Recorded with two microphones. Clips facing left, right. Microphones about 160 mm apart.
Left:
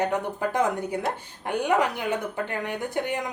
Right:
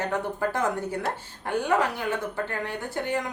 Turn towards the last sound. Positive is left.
turn(degrees=15)  # may be behind; listen again after turning